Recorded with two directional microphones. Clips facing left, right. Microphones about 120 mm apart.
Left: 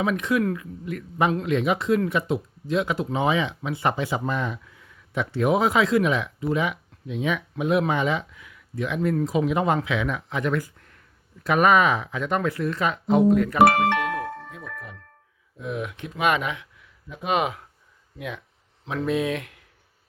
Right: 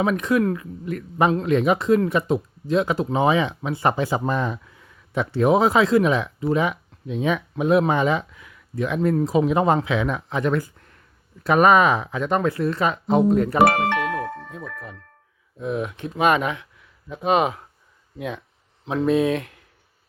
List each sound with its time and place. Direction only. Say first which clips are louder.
0.0 s speech: right 3 dB; 40° right (ahead or behind)
15.6 s speech: right 4 dB; 35° right (ahead or behind)
18.9 s speech: right 5 dB; 35° right (ahead or behind)